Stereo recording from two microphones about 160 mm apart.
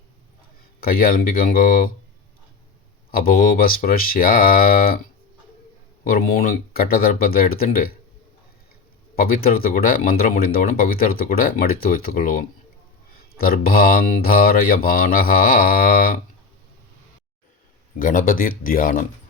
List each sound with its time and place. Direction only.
0.8 s speech: 65° left (ahead or behind)
3.1 s speech: 65° left (ahead or behind)
6.1 s speech: 65° left (ahead or behind)
9.1 s speech: 65° left (ahead or behind)
13.1 s speech: 70° left (ahead or behind)
18.0 s speech: 60° left (ahead or behind)